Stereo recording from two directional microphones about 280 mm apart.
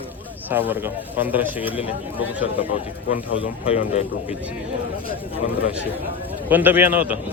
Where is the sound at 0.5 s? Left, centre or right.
Centre.